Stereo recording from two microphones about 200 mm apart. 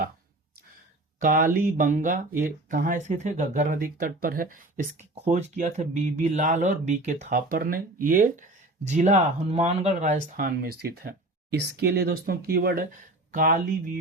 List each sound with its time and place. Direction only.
1.2 s speech: 45° right (ahead or behind)